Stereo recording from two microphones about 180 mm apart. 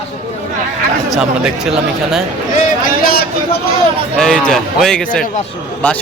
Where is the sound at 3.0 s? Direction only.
55° left (ahead or behind).